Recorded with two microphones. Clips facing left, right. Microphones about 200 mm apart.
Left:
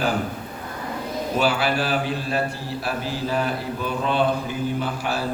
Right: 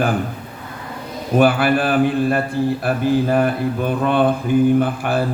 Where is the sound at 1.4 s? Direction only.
55° right (ahead or behind).